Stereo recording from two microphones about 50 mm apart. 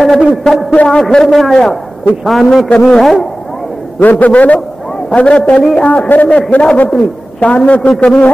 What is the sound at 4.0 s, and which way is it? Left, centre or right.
A man's voice, left.